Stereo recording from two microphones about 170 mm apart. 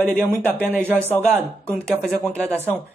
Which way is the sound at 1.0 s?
10° left (ahead or behind).